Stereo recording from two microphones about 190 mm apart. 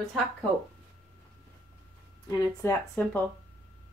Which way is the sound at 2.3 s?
20° left (ahead or behind).